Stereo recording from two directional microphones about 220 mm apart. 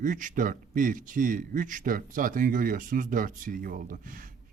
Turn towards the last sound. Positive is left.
turn(degrees=-40)  # may be behind; listen again after turning